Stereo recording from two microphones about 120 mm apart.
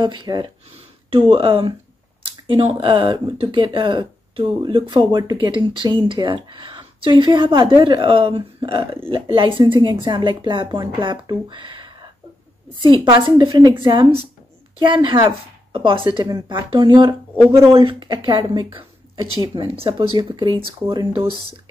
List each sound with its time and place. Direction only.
0.0 s a woman's voice: 40° right (ahead or behind)
0.7 s a woman's voice: 50° right (ahead or behind)
19.7 s speech: 50° right (ahead or behind)
20.2 s a woman's voice: 40° right (ahead or behind)